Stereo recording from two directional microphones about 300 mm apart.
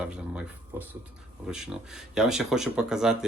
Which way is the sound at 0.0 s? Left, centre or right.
Centre.